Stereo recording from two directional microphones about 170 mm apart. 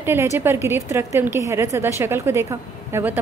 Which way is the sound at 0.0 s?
15° right (ahead or behind).